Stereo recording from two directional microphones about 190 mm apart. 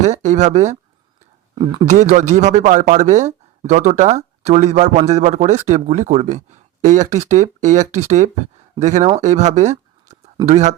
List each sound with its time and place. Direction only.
0.0 s speech: 40° right (ahead or behind)
1.5 s speech: 25° right (ahead or behind)
1.9 s speech: 40° right (ahead or behind)
9.2 s a sound: 40° right (ahead or behind)
10.4 s speech: 35° right (ahead or behind)